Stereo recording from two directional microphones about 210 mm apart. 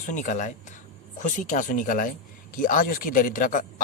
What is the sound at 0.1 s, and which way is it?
Speech, 35° left (ahead or behind).